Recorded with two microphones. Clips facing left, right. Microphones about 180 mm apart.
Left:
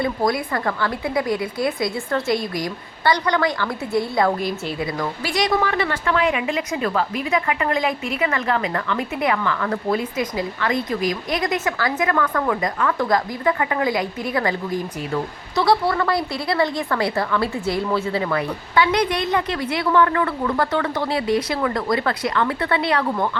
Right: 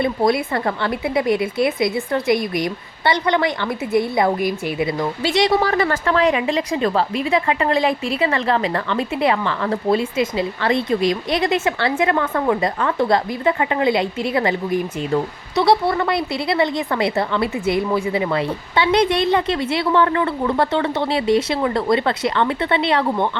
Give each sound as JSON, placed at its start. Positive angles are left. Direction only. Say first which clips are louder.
{"t": 0.0, "sound": "a woman's voice", "louder": "right 3 dB", "side_deg": -25}